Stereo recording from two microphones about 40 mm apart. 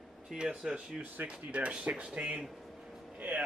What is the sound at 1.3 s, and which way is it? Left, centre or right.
Speech, right.